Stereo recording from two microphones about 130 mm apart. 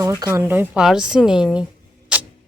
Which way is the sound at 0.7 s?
5° right (ahead or behind).